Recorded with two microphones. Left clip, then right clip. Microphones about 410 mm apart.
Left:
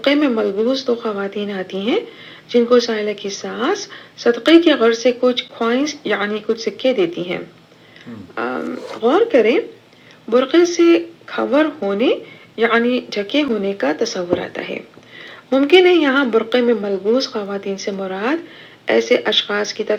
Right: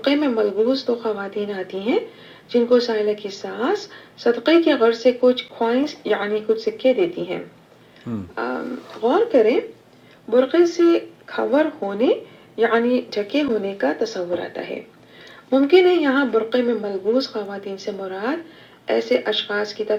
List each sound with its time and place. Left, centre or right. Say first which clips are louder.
0.0 s speech: left 3 dB; left
8.4 s speech: left 4 dB; left